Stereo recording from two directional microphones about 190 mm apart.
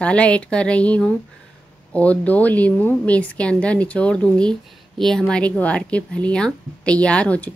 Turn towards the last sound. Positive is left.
turn(degrees=5)  # may be behind; listen again after turning